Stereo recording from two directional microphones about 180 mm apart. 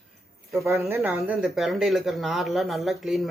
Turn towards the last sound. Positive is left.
turn(degrees=0)  # may be behind; listen again after turning